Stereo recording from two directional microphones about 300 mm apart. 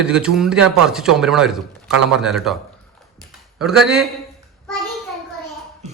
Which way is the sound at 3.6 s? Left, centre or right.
Centre.